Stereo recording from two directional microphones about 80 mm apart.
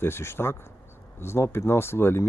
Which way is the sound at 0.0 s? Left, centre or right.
Left.